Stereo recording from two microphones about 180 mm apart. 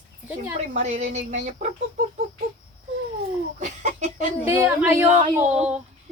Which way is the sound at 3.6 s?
40° right (ahead or behind).